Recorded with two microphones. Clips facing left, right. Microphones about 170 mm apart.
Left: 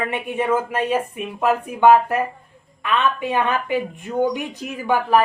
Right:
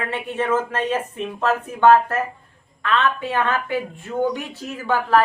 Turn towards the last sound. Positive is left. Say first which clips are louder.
# left 1 dB
turn(degrees=15)  # may be behind; listen again after turning